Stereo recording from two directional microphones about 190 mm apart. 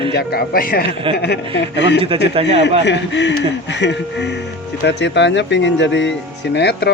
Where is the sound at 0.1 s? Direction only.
55° left (ahead or behind).